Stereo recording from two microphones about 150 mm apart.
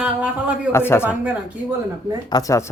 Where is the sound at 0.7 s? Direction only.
15° left (ahead or behind).